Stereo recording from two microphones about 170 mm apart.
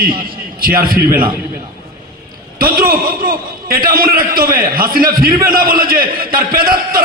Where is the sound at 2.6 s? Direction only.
60° right (ahead or behind).